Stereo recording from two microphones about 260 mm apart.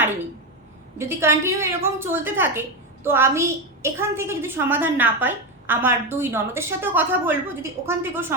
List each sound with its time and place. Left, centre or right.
0.9 s a woman's voice: centre